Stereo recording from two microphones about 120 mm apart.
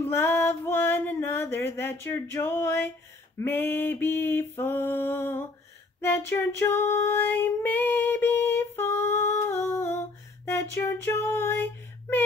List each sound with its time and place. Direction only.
0.0 s music: 20° left (ahead or behind)
3.3 s a sound: 15° left (ahead or behind)
5.9 s female singing: 20° left (ahead or behind)
10.4 s music: 20° left (ahead or behind)